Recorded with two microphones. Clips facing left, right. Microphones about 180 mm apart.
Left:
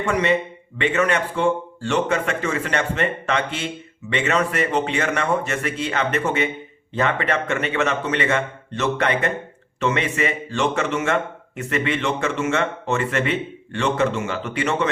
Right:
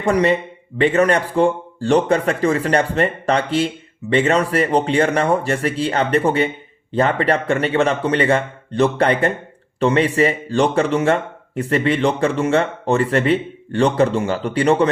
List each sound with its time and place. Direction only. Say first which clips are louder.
0.0 s a man's voice: right 4 dB; 35° right (ahead or behind)